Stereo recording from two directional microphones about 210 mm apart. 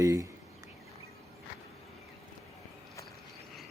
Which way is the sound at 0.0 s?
15° right (ahead or behind).